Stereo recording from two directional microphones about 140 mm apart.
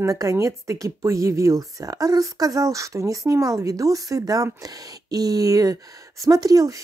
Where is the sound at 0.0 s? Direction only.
25° right (ahead or behind).